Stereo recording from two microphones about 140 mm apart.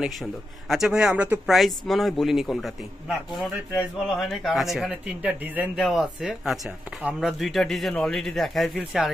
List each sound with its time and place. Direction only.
0.0 s a man's voice: centre (ahead or behind)
4.3 s a man's voice: centre (ahead or behind)